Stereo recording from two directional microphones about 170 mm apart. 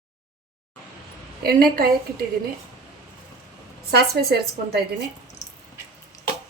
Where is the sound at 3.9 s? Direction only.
70° right (ahead or behind).